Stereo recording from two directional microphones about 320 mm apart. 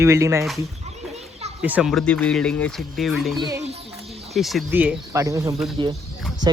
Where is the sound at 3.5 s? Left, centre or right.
Centre.